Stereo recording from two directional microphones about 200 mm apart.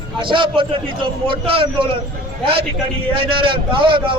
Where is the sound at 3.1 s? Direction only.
25° right (ahead or behind).